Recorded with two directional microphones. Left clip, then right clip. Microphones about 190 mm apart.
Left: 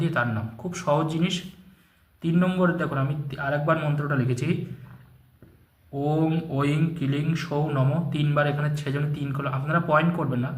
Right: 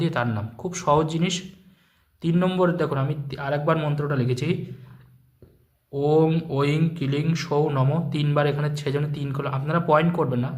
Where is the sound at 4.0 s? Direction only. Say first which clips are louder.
Right 2 dB; 30° right (ahead or behind).